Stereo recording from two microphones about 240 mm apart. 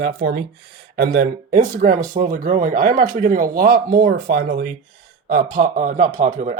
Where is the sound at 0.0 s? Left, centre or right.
Right.